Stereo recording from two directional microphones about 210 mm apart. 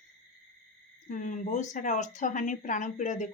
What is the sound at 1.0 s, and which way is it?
Speech, 35° left (ahead or behind).